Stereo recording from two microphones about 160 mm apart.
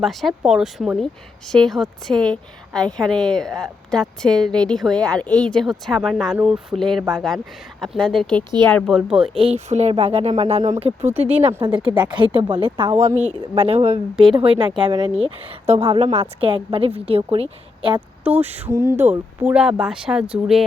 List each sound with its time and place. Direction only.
0.0 s speech: centre (ahead or behind)
9.3 s a woman's voice: 35° right (ahead or behind)
11.0 s speech: 10° right (ahead or behind)
11.4 s a woman's voice: 35° right (ahead or behind)
18.2 s speech: 10° right (ahead or behind)